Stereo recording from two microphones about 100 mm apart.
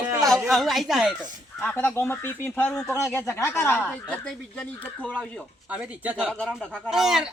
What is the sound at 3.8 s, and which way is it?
Speech, 10° left (ahead or behind).